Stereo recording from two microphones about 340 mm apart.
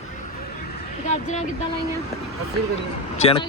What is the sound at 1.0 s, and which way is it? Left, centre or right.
Speech, left.